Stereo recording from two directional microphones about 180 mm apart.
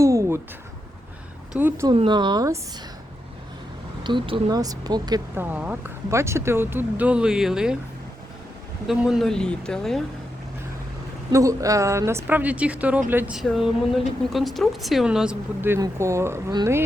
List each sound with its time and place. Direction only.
0.0 s a sound: 15° right (ahead or behind)
1.5 s speech: 15° right (ahead or behind)
1.9 s speech: 25° right (ahead or behind)
4.0 s speech: 25° right (ahead or behind)
5.3 s speech: 10° right (ahead or behind)
8.9 s speech: centre (ahead or behind)
11.3 s speech: 20° right (ahead or behind)